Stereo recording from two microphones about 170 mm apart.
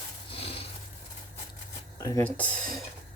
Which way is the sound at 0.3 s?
35° left (ahead or behind).